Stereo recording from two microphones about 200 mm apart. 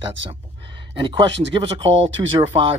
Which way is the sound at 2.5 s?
30° right (ahead or behind).